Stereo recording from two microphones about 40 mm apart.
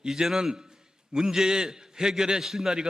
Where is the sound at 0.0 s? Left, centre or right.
Centre.